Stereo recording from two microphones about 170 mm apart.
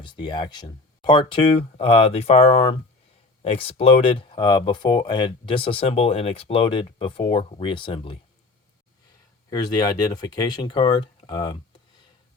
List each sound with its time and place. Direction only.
0.0 s speech: 25° left (ahead or behind)
9.5 s speech: 25° left (ahead or behind)